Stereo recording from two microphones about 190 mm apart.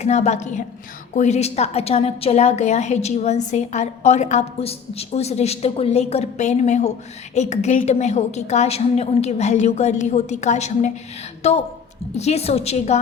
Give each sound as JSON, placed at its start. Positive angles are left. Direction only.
{"t": 0.0, "sound": "a woman's voice", "side_deg": 35}